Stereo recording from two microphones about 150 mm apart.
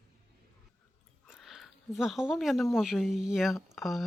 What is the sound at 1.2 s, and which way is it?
Speech, centre (ahead or behind).